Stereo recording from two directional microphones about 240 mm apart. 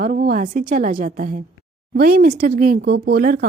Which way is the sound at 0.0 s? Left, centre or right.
Right.